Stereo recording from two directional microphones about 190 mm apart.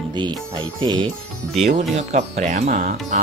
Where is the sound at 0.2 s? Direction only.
25° right (ahead or behind).